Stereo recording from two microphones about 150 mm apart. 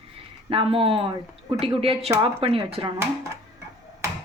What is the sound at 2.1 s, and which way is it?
Speech, 20° right (ahead or behind).